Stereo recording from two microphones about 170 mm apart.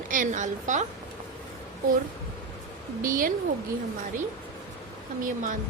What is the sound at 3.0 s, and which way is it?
Speech, 55° right (ahead or behind).